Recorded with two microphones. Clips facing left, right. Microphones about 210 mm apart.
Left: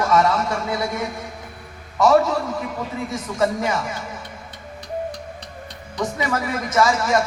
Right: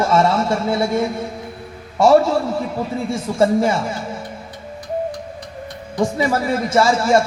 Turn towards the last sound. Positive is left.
turn(degrees=-30)  # may be behind; listen again after turning